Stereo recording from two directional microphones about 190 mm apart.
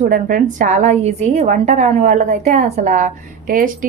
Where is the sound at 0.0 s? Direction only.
45° right (ahead or behind).